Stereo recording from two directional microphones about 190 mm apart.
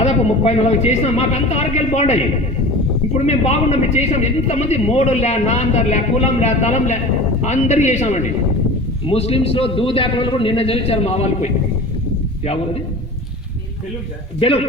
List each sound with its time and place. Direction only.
0.0 s a man's voice: 35° left (ahead or behind)
3.2 s a man's voice: 35° left (ahead or behind)
14.3 s a man's voice: 30° left (ahead or behind)